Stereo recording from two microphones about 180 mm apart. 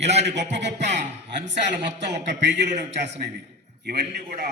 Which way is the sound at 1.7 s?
75° right (ahead or behind).